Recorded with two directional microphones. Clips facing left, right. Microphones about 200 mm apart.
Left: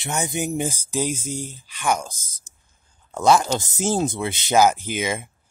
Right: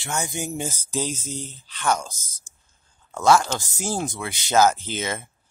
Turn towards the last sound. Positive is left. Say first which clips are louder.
# left 3 dB
turn(degrees=15)  # may be behind; listen again after turning